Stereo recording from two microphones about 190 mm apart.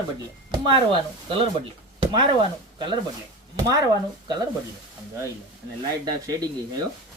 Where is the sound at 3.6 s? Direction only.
20° right (ahead or behind).